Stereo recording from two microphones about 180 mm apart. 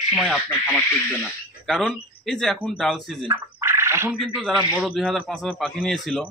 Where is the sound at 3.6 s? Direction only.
15° right (ahead or behind).